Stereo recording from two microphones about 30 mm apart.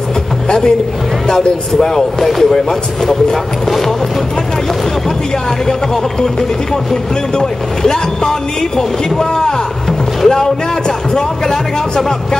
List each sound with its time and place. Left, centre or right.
0.5 s speech: left
2.1 s speech: centre
3.6 s speech: centre
6.2 s speech: centre